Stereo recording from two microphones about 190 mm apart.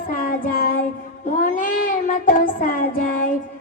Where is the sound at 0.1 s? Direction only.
45° left (ahead or behind).